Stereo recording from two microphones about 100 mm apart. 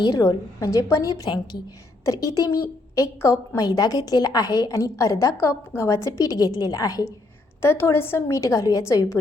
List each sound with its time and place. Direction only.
0.0 s a woman's voice: 35° left (ahead or behind)
7.6 s a woman's voice: 25° left (ahead or behind)